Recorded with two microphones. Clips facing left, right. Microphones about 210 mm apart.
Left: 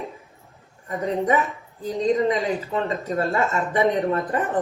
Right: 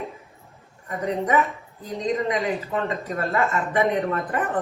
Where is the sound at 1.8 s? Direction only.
30° left (ahead or behind).